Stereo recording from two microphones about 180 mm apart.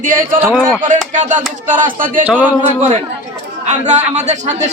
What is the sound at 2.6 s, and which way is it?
A man's voice, 40° right (ahead or behind).